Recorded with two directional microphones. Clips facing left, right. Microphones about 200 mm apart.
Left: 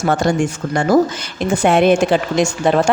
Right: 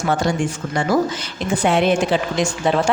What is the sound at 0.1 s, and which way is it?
Speech, 50° left (ahead or behind).